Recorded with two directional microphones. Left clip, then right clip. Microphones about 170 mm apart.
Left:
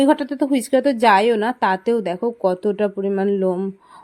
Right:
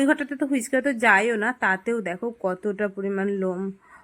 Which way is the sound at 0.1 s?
30° left (ahead or behind).